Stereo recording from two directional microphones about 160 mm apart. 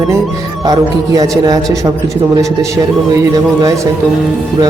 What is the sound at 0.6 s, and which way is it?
Speech, 25° right (ahead or behind).